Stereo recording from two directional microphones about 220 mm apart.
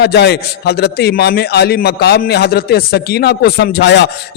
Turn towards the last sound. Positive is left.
turn(degrees=50)  # may be behind; listen again after turning